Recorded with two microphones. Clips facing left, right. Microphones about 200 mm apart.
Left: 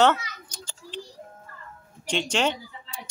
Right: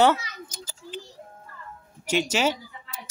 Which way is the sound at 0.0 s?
10° right (ahead or behind).